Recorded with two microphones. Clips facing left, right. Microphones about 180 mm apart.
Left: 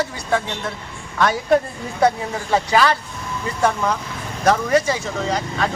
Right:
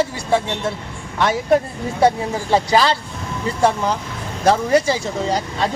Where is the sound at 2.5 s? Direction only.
30° right (ahead or behind).